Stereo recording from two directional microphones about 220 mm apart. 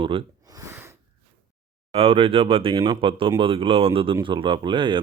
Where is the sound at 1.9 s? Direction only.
25° right (ahead or behind).